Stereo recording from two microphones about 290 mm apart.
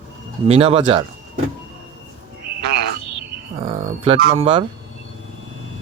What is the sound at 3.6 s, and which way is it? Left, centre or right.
A man's voice, centre.